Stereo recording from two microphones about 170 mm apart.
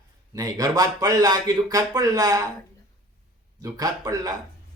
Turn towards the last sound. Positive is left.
turn(degrees=-20)  # may be behind; listen again after turning